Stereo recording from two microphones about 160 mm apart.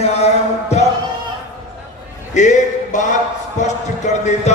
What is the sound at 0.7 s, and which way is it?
Speech, 45° left (ahead or behind).